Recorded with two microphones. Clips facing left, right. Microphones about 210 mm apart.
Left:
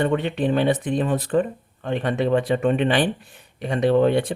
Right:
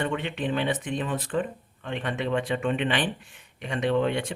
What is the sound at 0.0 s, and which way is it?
Speech, 40° left (ahead or behind).